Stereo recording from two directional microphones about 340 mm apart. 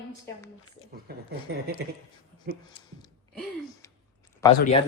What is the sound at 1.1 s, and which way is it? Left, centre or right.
Speech, right.